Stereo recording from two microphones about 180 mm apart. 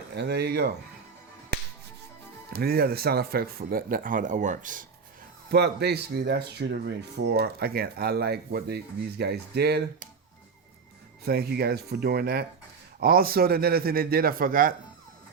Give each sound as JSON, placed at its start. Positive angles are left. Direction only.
{"t": 0.1, "sound": "speech", "side_deg": -65}
{"t": 2.5, "sound": "speech", "side_deg": -60}
{"t": 5.5, "sound": "speech", "side_deg": -65}
{"t": 11.3, "sound": "speech", "side_deg": -60}